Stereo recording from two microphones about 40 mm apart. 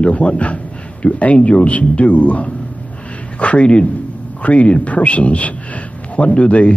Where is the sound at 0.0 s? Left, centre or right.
Left.